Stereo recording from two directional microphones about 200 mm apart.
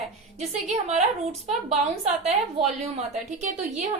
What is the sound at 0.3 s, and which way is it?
Speech, 35° right (ahead or behind).